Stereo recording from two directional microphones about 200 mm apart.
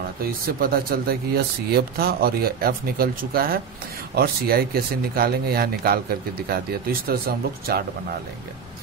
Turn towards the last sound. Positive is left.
turn(degrees=-50)  # may be behind; listen again after turning